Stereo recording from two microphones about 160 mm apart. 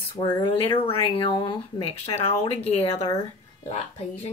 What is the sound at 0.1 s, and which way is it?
Speech, 25° left (ahead or behind).